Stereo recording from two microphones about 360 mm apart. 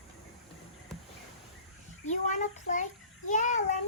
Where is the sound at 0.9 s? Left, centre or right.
Centre.